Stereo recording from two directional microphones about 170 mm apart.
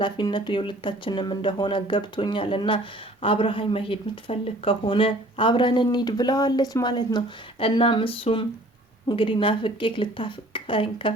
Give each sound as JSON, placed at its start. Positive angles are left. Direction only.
{"t": 0.0, "sound": "a woman's voice", "side_deg": 25}